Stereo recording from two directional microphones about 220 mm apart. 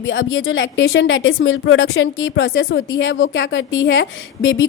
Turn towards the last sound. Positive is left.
turn(degrees=60)  # may be behind; listen again after turning